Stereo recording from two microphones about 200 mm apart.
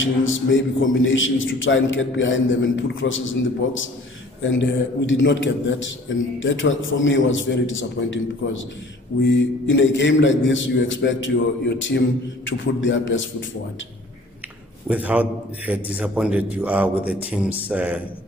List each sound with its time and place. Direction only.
0.0 s a man's voice: 75° left (ahead or behind)
9.7 s a man's voice: 65° left (ahead or behind)
14.9 s a man's voice: 5° right (ahead or behind)